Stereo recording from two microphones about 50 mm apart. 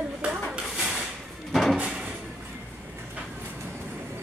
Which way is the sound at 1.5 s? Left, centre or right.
Centre.